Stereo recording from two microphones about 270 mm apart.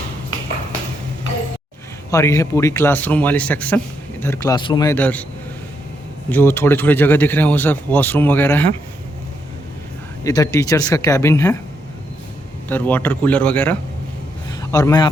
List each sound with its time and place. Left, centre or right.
2.0 s speech: centre
6.2 s speech: centre
10.2 s speech: centre
12.6 s a man's voice: centre